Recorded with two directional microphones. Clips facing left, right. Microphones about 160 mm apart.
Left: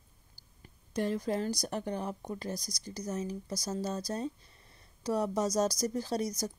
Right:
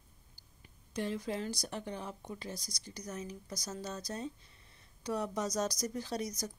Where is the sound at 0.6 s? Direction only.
45° left (ahead or behind).